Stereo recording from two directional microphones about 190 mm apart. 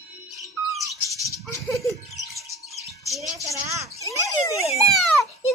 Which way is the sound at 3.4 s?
15° right (ahead or behind).